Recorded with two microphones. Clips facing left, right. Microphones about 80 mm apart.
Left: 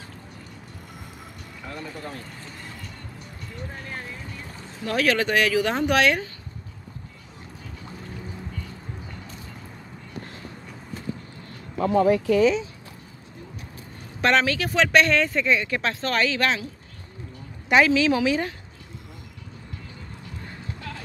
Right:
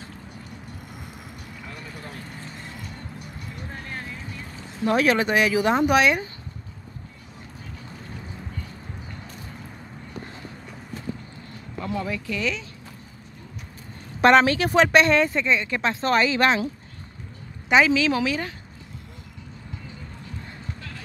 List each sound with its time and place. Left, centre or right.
3.2 s vehicle: centre
4.8 s speech: right
11.8 s speech: left
14.2 s speech: right
15.4 s speech: centre
15.7 s speech: centre
16.0 s speech: right
17.6 s speech: centre